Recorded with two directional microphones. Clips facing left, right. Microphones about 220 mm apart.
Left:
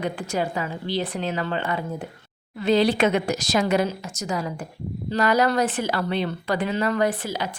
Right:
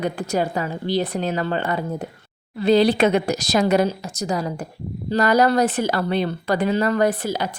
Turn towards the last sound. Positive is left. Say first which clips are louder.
# right 4 dB
turn(degrees=-40)  # may be behind; listen again after turning